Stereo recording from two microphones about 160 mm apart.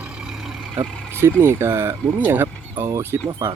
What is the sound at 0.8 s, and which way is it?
Speech, 15° right (ahead or behind).